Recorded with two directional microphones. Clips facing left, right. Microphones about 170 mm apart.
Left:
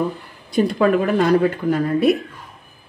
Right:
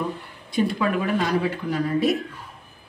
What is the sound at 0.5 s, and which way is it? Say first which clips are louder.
Speech: left 6 dB; 45° left (ahead or behind).